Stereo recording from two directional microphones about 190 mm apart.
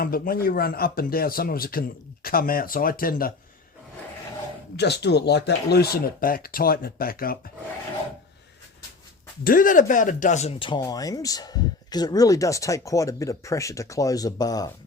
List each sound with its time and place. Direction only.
0.0 s speech: 50° left (ahead or behind)
4.8 s speech: 60° left (ahead or behind)
9.4 s speech: 45° left (ahead or behind); by 14.7 s 20° left (ahead or behind)